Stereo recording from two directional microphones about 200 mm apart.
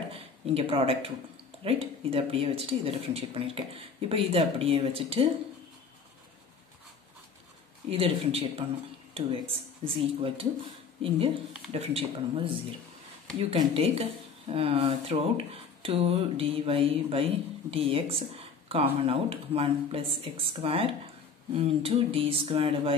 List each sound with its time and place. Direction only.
0.1 s speech: 30° right (ahead or behind)
7.9 s speech: 30° right (ahead or behind)